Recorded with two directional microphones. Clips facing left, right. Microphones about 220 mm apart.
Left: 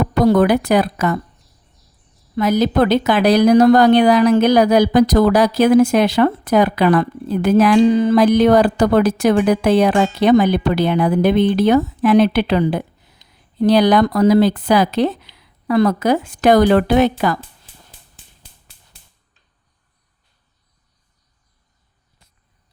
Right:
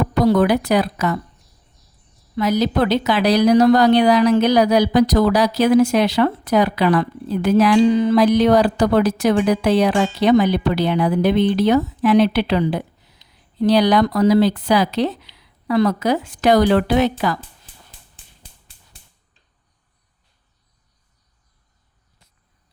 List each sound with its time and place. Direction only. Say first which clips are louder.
0.1 s speech: left 2 dB; 50° left (ahead or behind)
2.3 s speech: left 3 dB; 50° left (ahead or behind)